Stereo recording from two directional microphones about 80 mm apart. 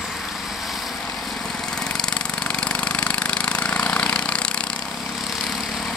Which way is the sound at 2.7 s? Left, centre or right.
Centre.